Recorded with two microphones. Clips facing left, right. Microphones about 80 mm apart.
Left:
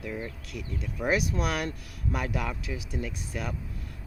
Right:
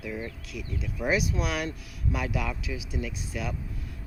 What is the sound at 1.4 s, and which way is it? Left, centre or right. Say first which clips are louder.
Speech: even; left.